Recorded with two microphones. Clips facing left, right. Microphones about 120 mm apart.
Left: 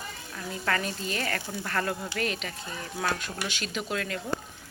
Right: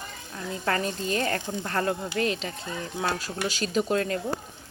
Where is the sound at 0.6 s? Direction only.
30° right (ahead or behind).